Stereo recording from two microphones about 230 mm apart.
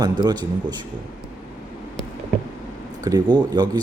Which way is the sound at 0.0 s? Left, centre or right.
Centre.